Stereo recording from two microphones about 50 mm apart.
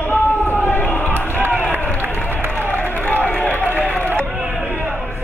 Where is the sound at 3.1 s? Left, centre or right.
Left.